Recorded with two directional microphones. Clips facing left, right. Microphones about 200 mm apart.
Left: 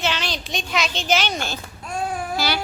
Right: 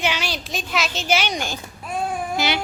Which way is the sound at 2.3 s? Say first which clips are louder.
Right 1 dB; 20° right (ahead or behind).